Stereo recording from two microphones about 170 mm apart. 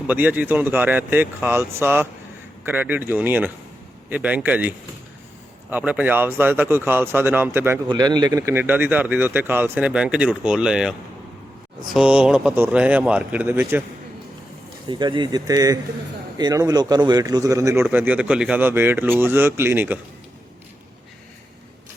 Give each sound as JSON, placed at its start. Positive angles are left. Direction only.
{"t": 0.1, "sound": "a man's voice", "side_deg": -10}
{"t": 5.7, "sound": "a man's voice", "side_deg": -10}
{"t": 7.9, "sound": "a man's voice", "side_deg": -25}
{"t": 11.9, "sound": "a man's voice", "side_deg": -5}
{"t": 14.8, "sound": "a man's voice", "side_deg": -25}